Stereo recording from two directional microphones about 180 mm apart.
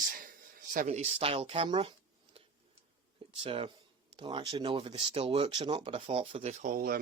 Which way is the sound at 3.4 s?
30° right (ahead or behind).